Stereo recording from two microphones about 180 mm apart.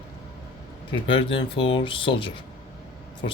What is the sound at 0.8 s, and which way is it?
Speech, 25° left (ahead or behind).